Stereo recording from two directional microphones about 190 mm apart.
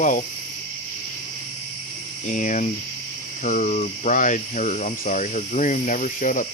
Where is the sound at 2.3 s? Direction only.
40° left (ahead or behind).